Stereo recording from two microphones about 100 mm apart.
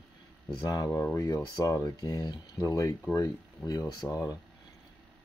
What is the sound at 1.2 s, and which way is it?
Speech, 35° left (ahead or behind).